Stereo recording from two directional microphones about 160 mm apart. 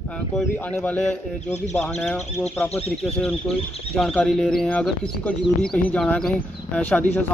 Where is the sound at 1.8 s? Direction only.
Centre (ahead or behind).